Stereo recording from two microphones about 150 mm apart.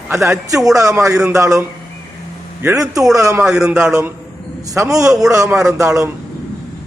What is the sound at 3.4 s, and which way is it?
Speech, 5° right (ahead or behind).